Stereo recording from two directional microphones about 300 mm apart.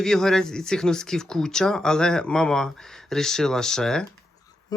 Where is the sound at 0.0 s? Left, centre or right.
Centre.